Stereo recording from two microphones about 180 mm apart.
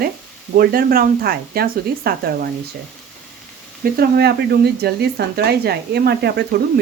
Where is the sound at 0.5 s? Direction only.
55° right (ahead or behind).